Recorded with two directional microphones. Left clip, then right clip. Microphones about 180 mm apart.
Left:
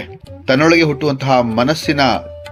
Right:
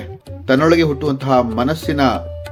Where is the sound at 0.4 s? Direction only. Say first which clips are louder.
Left 2 dB; 35° left (ahead or behind).